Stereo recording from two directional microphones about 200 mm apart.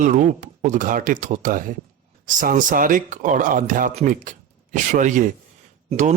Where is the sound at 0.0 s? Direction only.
40° right (ahead or behind).